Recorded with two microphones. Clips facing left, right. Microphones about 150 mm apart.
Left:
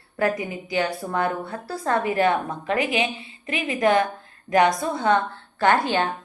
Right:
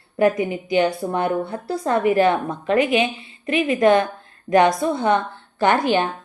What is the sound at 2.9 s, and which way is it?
Speech, 20° left (ahead or behind).